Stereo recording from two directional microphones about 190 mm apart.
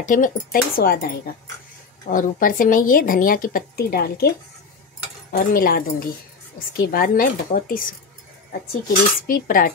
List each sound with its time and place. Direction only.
0.0 s speech: 45° left (ahead or behind)
5.3 s speech: 50° left (ahead or behind)
9.3 s speech: 45° left (ahead or behind)